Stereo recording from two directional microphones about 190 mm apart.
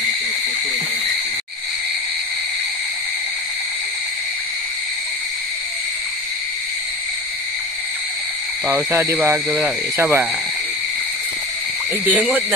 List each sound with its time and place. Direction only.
8.7 s speech: 10° right (ahead or behind)
12.1 s speech: 10° right (ahead or behind)